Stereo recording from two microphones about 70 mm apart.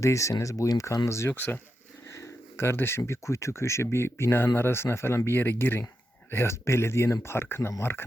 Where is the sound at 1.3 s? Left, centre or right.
Left.